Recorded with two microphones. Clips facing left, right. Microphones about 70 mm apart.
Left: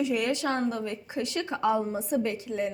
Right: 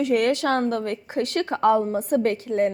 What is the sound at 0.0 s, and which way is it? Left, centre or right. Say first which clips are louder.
A woman's voice: right 6 dB; right.